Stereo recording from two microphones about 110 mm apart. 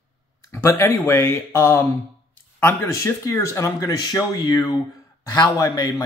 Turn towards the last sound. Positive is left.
turn(degrees=35)  # may be behind; listen again after turning